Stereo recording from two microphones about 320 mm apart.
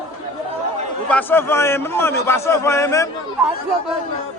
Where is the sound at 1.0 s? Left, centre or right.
Centre.